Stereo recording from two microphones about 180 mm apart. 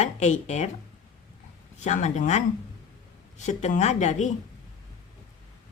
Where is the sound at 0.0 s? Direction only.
40° left (ahead or behind).